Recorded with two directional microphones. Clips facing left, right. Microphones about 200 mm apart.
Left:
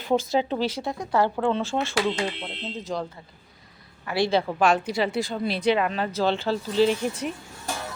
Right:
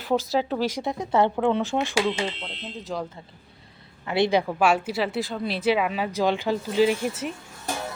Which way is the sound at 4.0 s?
20° right (ahead or behind).